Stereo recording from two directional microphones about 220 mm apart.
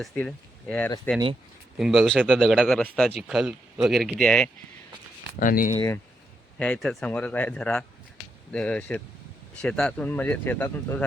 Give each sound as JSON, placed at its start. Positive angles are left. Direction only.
{"t": 0.0, "sound": "speech", "side_deg": 5}
{"t": 5.4, "sound": "speech", "side_deg": 40}
{"t": 5.7, "sound": "speech", "side_deg": 15}